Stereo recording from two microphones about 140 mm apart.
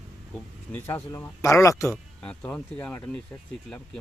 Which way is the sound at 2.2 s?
5° left (ahead or behind).